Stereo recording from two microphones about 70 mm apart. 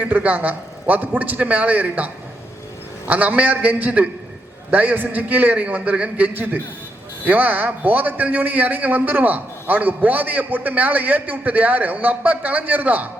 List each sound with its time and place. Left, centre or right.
0.0 s a man's voice: right
3.1 s a man's voice: right